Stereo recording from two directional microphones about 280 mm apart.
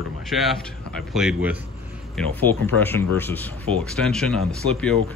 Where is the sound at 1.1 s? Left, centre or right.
Centre.